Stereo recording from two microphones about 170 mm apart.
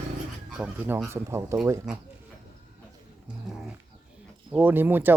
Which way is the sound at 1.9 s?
5° right (ahead or behind).